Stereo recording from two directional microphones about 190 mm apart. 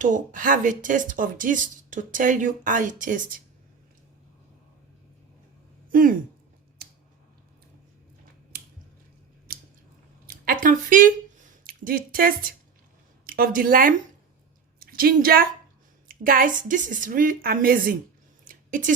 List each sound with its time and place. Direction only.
0.0 s speech: 45° right (ahead or behind)
5.9 s speech: 45° right (ahead or behind)
9.5 s squish: 50° right (ahead or behind)
10.2 s a sound: 50° right (ahead or behind)
13.2 s a woman's voice: 50° right (ahead or behind)
18.4 s a sound: 45° right (ahead or behind)